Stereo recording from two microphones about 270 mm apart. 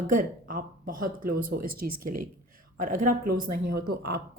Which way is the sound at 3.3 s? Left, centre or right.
Right.